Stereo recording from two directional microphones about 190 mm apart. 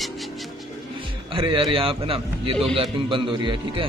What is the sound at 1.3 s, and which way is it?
A man's voice, 25° right (ahead or behind).